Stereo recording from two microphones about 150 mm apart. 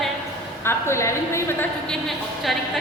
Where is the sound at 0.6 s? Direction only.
20° left (ahead or behind).